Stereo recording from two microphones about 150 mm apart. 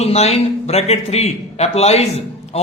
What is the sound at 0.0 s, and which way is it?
Speech, 45° left (ahead or behind).